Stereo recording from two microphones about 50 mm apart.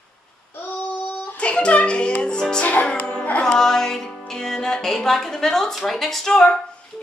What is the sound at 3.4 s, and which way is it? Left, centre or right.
Music, centre.